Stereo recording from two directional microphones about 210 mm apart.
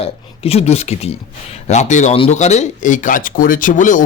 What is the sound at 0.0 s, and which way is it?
Speech, 30° left (ahead or behind).